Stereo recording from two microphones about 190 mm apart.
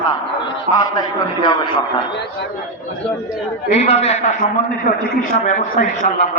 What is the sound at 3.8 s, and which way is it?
Speech, 35° left (ahead or behind).